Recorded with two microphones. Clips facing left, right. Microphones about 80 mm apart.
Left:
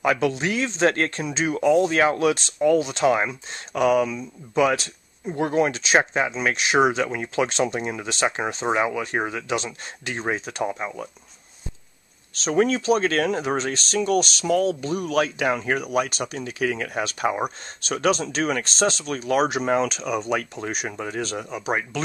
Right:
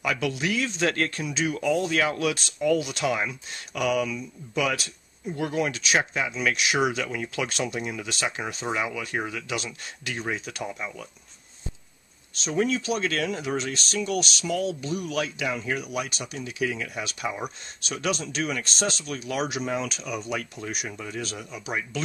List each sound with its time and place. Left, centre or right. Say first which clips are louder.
0.0 s speech: left 5 dB; left
12.4 s speech: left 6 dB; left
19.9 s speech: left 6 dB; left
20.7 s speech: left 5 dB; left